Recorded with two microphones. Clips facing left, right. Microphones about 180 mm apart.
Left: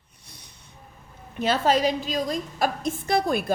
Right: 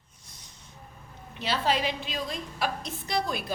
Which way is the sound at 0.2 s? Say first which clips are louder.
Left 3 dB; 65° left (ahead or behind).